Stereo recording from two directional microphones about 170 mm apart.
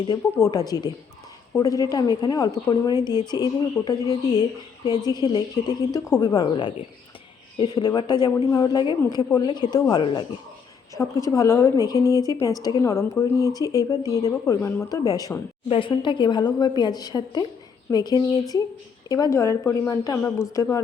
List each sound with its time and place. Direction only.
0.1 s a woman's voice: 20° left (ahead or behind)